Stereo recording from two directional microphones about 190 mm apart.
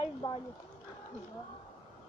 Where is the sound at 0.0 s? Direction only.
25° left (ahead or behind).